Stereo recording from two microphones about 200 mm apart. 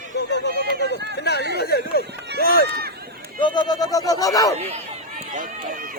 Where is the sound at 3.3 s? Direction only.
20° left (ahead or behind).